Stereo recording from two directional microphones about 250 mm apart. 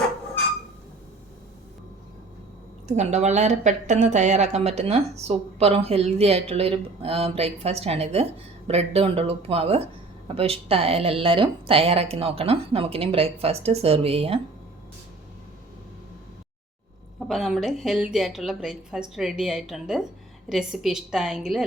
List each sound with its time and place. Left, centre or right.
2.8 s a woman's voice: right
17.2 s a woman's voice: centre